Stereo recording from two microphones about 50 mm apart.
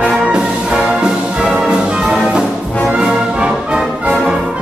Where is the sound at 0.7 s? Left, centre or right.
Centre.